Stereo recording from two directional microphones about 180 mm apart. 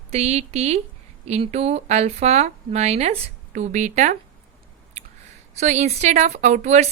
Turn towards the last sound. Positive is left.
turn(degrees=-40)  # may be behind; listen again after turning